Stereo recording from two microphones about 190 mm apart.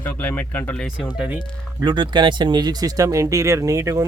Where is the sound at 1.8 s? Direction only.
25° right (ahead or behind).